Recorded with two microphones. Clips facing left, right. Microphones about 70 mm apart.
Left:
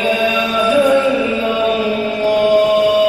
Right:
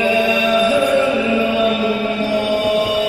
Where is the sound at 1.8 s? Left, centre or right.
Right.